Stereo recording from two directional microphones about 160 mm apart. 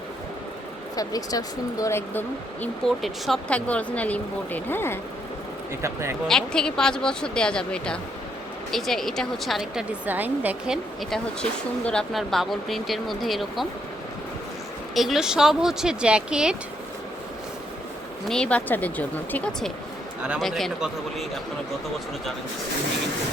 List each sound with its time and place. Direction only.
0.9 s speech: 20° left (ahead or behind)
5.8 s speech: 15° right (ahead or behind)
6.2 s a woman's voice: 5° left (ahead or behind)
11.9 s a woman's voice: 5° left (ahead or behind)
14.9 s a woman's voice: centre (ahead or behind)
18.3 s speech: 5° left (ahead or behind)
20.2 s a woman's voice: 5° right (ahead or behind)